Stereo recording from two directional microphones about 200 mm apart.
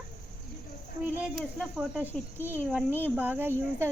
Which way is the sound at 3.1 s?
10° right (ahead or behind).